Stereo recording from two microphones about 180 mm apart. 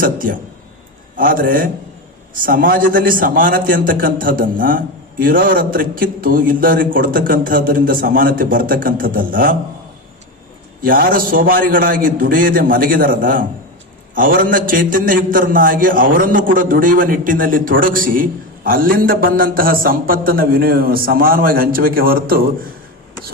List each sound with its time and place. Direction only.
0.0 s a man's voice: 50° right (ahead or behind)
10.8 s a man's voice: 50° right (ahead or behind)